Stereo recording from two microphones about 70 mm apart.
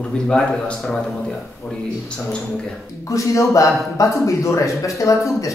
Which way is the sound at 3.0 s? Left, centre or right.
Left.